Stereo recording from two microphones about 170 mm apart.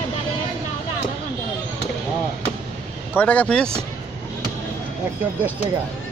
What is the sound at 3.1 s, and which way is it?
Speech, 10° left (ahead or behind).